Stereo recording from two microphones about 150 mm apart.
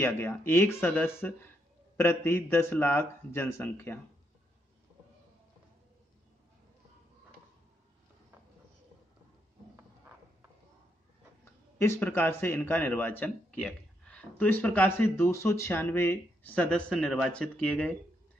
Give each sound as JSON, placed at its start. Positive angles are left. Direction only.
{"t": 0.5, "sound": "a man's voice", "side_deg": 15}
{"t": 11.8, "sound": "a man's voice", "side_deg": 15}